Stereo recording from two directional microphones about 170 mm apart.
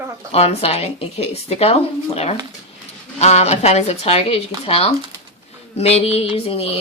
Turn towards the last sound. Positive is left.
turn(degrees=35)  # may be behind; listen again after turning